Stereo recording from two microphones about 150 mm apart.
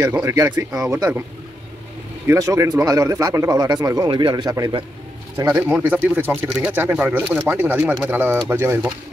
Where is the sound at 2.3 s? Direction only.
20° right (ahead or behind).